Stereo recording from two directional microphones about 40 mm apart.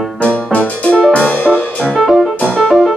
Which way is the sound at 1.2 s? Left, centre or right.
Left.